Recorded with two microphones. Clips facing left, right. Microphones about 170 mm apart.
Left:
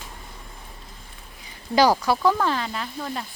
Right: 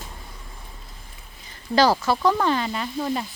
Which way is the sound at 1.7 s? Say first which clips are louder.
Even; 10° left (ahead or behind).